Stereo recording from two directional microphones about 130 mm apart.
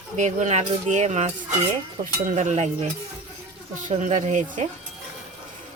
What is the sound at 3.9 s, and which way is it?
Speech, 70° right (ahead or behind).